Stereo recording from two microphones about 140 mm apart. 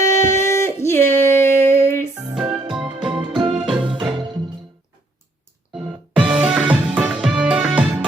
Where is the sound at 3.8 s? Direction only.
35° right (ahead or behind).